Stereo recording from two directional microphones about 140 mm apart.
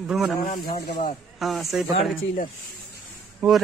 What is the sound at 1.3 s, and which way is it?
Speech, centre (ahead or behind).